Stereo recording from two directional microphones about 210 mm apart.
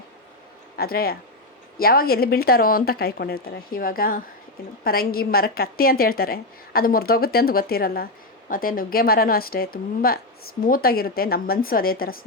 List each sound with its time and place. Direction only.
0.8 s a woman's voice: 45° left (ahead or behind)